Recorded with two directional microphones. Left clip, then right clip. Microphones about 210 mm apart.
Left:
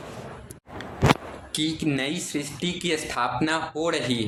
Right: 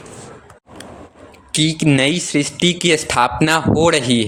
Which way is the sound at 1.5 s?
40° right (ahead or behind).